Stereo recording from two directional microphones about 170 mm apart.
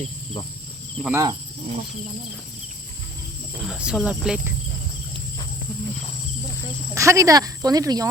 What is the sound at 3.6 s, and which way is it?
Speech, 5° right (ahead or behind).